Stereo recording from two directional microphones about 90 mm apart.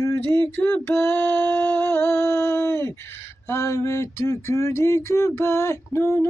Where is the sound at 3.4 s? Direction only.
30° left (ahead or behind).